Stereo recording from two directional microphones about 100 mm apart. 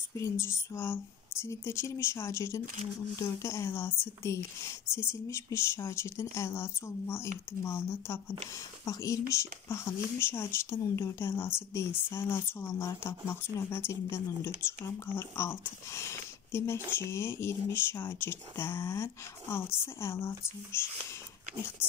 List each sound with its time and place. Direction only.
0.1 s speech: 30° left (ahead or behind)